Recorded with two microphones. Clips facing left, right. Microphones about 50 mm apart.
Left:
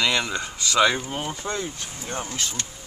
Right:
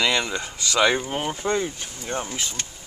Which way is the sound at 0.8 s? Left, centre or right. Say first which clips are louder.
Even; centre.